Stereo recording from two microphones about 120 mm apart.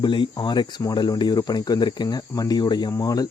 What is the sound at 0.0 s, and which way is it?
Speech, 40° left (ahead or behind).